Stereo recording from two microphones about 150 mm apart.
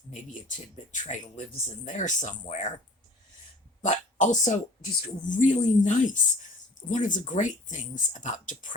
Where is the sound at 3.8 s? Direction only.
55° left (ahead or behind).